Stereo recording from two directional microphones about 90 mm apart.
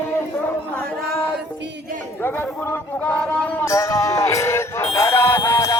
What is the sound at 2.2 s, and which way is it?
Speech, 25° left (ahead or behind).